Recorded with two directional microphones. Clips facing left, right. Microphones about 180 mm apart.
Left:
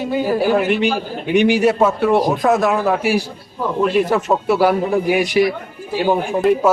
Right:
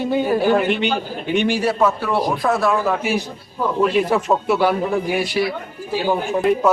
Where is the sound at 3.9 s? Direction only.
Centre (ahead or behind).